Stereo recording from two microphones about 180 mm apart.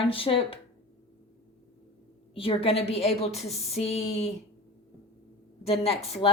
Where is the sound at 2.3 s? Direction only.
30° left (ahead or behind).